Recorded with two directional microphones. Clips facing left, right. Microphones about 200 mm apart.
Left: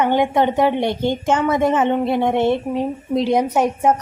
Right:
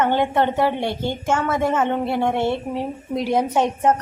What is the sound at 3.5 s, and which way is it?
Speech, 10° left (ahead or behind).